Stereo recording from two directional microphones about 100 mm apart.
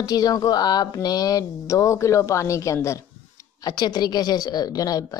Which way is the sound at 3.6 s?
45° left (ahead or behind).